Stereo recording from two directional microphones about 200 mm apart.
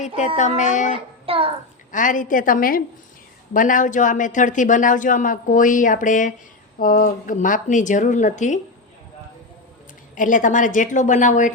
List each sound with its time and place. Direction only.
0.3 s speech: 40° left (ahead or behind)
0.9 s a child's voice: 30° right (ahead or behind)
1.9 s a woman's voice: 40° left (ahead or behind)
10.2 s speech: 40° left (ahead or behind)